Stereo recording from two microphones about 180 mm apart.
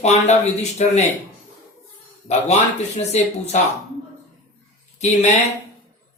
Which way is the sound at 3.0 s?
35° left (ahead or behind).